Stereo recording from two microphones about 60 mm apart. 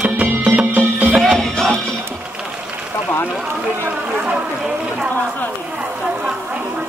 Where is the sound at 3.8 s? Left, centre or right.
Right.